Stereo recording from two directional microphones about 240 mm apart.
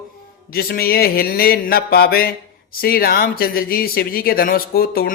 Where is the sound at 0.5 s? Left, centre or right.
Left.